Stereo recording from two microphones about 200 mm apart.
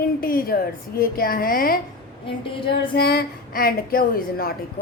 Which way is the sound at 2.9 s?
55° left (ahead or behind).